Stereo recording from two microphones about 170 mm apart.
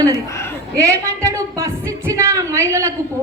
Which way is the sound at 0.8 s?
20° right (ahead or behind).